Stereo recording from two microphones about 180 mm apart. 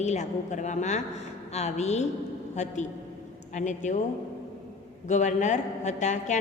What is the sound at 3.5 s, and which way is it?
Speech, 40° left (ahead or behind).